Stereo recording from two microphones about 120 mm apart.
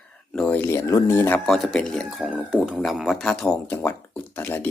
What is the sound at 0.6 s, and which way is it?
Speech, 25° left (ahead or behind).